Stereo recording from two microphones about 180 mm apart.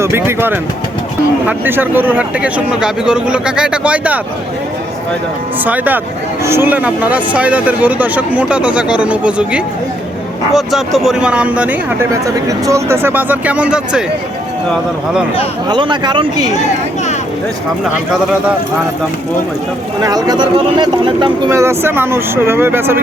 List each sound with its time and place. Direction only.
0.0 s speech: 15° right (ahead or behind)
5.6 s speech: 10° right (ahead or behind)
15.7 s speech: 25° right (ahead or behind)
20.0 s speech: 20° right (ahead or behind)
21.5 s speech: 15° right (ahead or behind)